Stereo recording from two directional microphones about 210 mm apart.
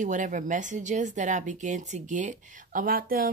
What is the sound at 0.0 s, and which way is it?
Speech, 35° right (ahead or behind).